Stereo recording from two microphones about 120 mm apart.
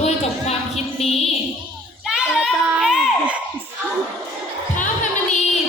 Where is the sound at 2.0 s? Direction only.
5° right (ahead or behind).